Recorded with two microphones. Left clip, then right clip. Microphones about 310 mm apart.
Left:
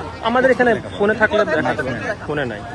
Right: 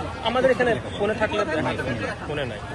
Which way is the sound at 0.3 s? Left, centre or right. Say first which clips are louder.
Left 6 dB; left.